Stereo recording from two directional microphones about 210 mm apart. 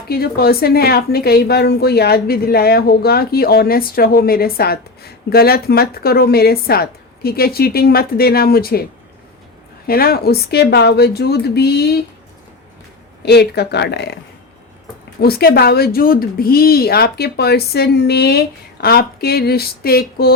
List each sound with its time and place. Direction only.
0.1 s a woman's voice: 45° left (ahead or behind)
9.8 s a woman's voice: 45° left (ahead or behind)
13.2 s a woman's voice: 50° left (ahead or behind)
15.2 s a woman's voice: 50° left (ahead or behind)